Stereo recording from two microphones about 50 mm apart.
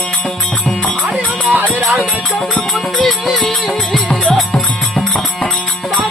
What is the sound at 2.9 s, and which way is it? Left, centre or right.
Music, centre.